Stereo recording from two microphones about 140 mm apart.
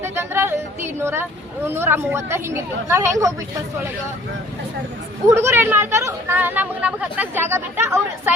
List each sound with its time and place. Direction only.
0.0 s speech: 15° right (ahead or behind)
5.3 s speech: 20° right (ahead or behind)